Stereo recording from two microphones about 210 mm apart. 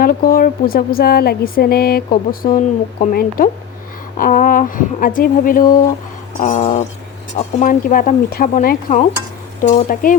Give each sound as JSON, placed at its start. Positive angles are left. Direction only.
{"t": 0.0, "sound": "speech", "side_deg": 45}